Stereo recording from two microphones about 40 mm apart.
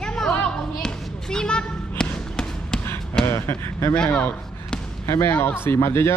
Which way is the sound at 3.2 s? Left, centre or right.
Left.